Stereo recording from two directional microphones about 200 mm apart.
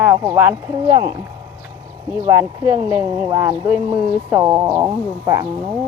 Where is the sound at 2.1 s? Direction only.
15° right (ahead or behind).